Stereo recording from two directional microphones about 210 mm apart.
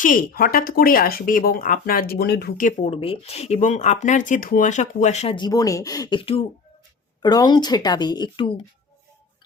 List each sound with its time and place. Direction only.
0.0 s speech: 40° left (ahead or behind); by 8.6 s 20° left (ahead or behind)